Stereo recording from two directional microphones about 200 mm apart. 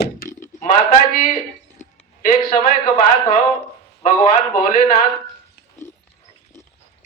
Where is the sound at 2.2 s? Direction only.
40° left (ahead or behind).